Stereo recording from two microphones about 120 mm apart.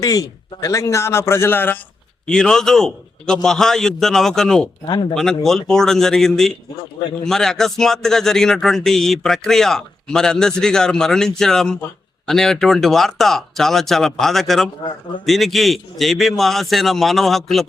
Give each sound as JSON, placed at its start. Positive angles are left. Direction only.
{"t": 0.0, "sound": "a man's voice", "side_deg": 30}
{"t": 2.2, "sound": "speech", "side_deg": 5}
{"t": 4.9, "sound": "speech", "side_deg": 35}
{"t": 5.1, "sound": "speech", "side_deg": 5}